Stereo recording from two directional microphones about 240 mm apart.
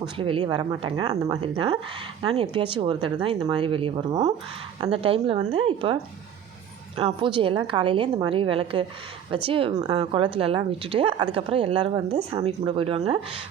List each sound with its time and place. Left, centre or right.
0.0 s a woman's voice: right